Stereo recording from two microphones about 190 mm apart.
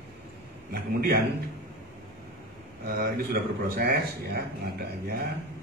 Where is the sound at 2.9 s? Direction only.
55° right (ahead or behind).